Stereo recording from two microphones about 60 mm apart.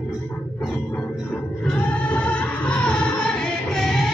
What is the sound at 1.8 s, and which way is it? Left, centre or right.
Music, left.